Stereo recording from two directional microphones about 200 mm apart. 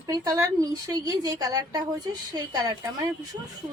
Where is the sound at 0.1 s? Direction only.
15° right (ahead or behind).